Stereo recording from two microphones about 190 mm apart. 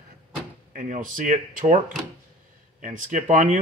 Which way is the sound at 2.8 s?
40° right (ahead or behind).